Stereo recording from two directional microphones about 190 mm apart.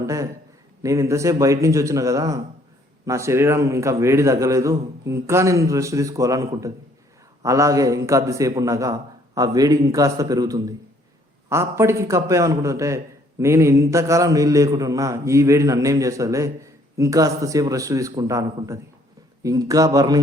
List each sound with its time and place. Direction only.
0.0 s a man's voice: 15° right (ahead or behind)